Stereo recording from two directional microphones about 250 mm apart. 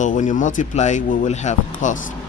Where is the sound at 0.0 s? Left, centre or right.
Left.